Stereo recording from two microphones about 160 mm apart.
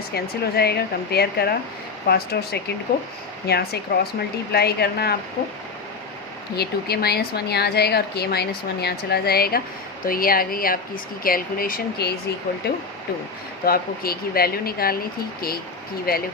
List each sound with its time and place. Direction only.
0.1 s a woman's voice: 80° left
6.6 s a woman's voice: 80° left
13.7 s speech: 70° left (ahead or behind)
16.1 s speech: 70° left (ahead or behind)